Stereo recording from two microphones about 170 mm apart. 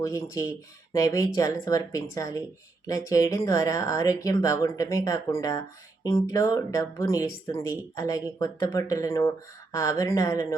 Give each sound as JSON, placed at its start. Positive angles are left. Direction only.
{"t": 0.0, "sound": "speech", "side_deg": 20}